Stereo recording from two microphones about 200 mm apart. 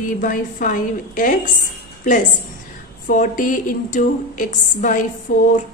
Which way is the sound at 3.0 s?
40° left (ahead or behind).